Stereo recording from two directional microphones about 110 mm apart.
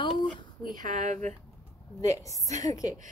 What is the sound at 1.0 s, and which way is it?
Speech, 90° right.